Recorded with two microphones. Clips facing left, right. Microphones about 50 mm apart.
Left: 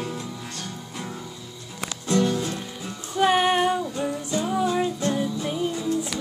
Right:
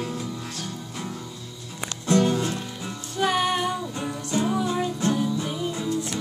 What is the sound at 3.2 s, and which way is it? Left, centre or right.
Music, centre.